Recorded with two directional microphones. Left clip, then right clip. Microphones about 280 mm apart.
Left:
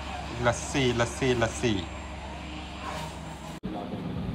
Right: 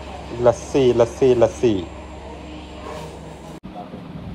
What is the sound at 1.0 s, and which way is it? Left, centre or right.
Speech, centre.